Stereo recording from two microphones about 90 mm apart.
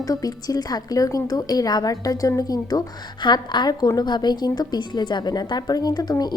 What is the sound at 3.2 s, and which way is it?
A woman's voice, 55° left (ahead or behind).